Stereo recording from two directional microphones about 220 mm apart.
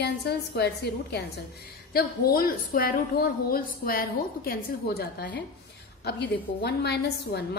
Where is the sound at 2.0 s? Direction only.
45° left (ahead or behind).